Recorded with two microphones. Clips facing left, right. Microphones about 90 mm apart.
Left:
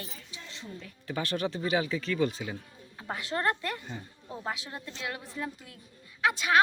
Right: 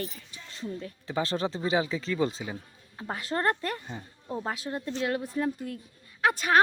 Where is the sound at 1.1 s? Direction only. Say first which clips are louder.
Right 2 dB; 25° right (ahead or behind); by 6.6 s 40° right (ahead or behind).